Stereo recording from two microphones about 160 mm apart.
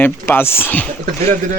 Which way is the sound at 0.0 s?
15° left (ahead or behind).